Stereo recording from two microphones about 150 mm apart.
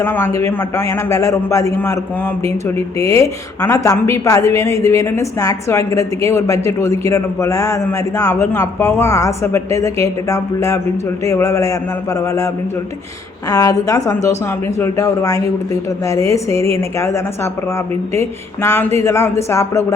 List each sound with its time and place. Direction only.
0.0 s a woman's voice: 15° left (ahead or behind)
13.5 s a woman's voice: 20° left (ahead or behind)